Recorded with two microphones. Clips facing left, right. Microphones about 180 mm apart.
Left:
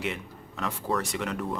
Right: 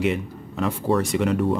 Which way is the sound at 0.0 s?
20° right (ahead or behind).